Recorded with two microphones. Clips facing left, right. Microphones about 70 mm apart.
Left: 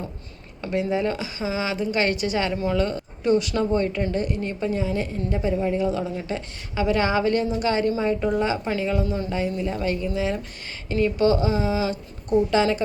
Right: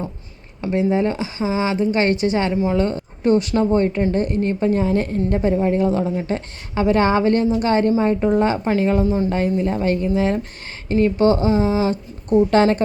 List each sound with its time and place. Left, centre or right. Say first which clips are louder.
0.6 s a woman's voice: right 5 dB; right
9.0 s a woman's voice: right 8 dB; right
9.6 s a woman's voice: right 6 dB; right